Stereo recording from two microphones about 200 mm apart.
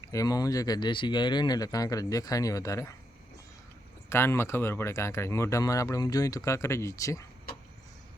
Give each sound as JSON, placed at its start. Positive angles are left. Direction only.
{"t": 0.1, "sound": "speech", "side_deg": 15}
{"t": 4.1, "sound": "speech", "side_deg": 10}